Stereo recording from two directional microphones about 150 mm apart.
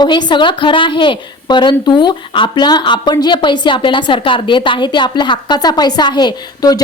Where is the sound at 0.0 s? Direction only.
30° left (ahead or behind).